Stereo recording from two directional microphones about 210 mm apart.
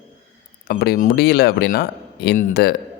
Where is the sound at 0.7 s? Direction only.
45° left (ahead or behind).